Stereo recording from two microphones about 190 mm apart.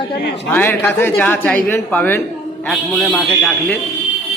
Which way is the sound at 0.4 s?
10° left (ahead or behind).